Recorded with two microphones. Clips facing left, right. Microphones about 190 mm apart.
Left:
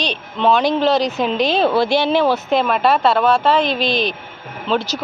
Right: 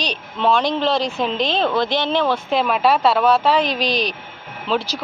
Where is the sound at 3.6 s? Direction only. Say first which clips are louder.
Left 2 dB; 40° right (ahead or behind).